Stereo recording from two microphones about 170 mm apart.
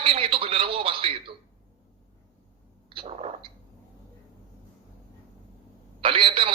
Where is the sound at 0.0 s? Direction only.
35° right (ahead or behind).